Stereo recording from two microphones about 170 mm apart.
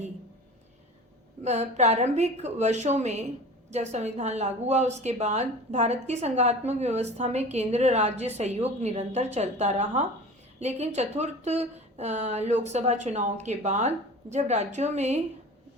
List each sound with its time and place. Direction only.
1.5 s a woman's voice: 40° right (ahead or behind)